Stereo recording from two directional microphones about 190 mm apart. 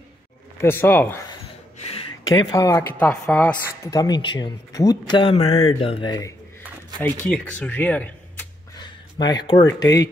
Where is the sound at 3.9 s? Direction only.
20° left (ahead or behind).